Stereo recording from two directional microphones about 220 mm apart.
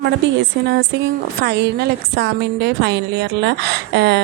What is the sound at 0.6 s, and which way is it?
A woman's voice, 60° right (ahead or behind).